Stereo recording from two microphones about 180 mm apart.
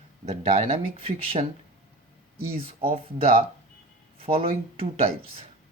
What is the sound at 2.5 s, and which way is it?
Speech, 30° right (ahead or behind).